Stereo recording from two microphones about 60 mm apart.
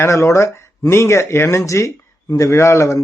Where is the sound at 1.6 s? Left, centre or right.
Left.